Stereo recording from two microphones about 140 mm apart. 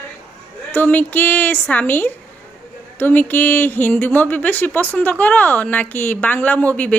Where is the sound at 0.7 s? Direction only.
15° left (ahead or behind).